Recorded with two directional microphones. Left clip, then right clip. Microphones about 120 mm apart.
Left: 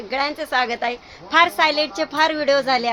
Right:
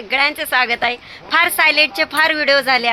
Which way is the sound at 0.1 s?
Centre (ahead or behind).